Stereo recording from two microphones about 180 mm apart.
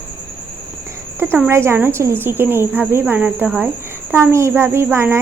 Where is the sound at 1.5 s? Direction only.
15° right (ahead or behind).